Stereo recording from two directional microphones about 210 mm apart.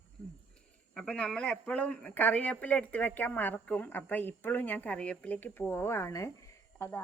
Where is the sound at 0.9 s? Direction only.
5° left (ahead or behind).